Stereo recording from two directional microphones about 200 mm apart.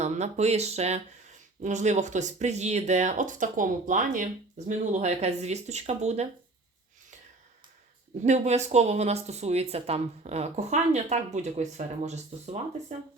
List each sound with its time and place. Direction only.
0.0 s speech: 35° right (ahead or behind)
8.2 s speech: 35° right (ahead or behind)